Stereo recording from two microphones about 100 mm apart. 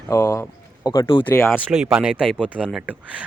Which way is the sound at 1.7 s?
5° right (ahead or behind).